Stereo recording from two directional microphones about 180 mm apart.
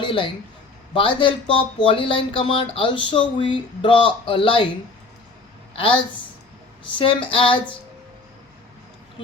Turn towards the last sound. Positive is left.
turn(degrees=30)  # may be behind; listen again after turning